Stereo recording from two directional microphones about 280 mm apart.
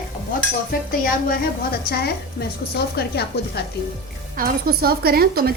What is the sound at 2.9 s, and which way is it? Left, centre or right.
Speech, left.